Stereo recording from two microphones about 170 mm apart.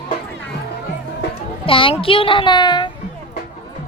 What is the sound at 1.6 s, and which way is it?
A child's voice, 30° left (ahead or behind).